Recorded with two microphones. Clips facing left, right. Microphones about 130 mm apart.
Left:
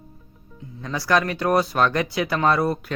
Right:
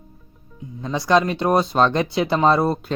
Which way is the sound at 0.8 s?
20° right (ahead or behind).